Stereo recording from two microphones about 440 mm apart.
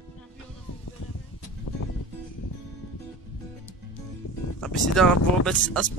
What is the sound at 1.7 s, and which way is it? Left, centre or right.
Music, left.